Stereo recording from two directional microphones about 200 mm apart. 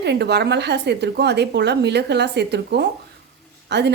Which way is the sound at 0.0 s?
60° right (ahead or behind).